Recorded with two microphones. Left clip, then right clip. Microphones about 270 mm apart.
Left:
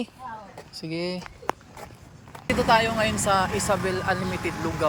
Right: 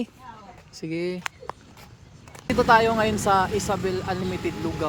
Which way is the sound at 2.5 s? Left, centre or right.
Centre.